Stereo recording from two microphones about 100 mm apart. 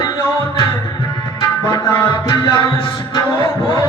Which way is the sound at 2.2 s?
45° left (ahead or behind).